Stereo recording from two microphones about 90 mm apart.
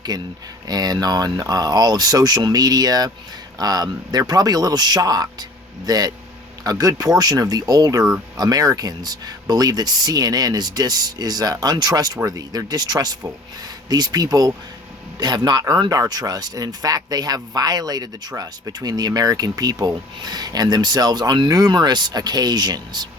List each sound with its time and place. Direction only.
0.1 s speech: 50° right (ahead or behind)